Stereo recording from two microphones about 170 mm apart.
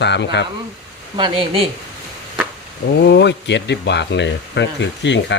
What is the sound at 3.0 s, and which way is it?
Speech, 85° left.